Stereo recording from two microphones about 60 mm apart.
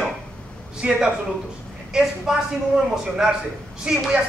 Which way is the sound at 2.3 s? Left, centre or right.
Centre.